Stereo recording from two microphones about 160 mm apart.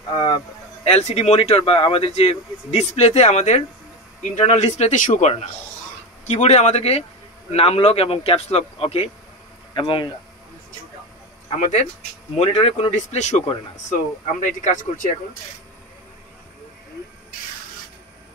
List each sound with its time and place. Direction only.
0.8 s speech: 40° left (ahead or behind)
11.6 s speech: 50° left (ahead or behind)